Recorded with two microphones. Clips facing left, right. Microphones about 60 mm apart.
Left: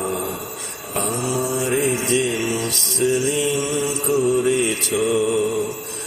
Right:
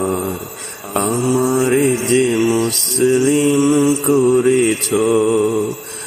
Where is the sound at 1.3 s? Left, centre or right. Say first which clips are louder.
Right 7 dB; right.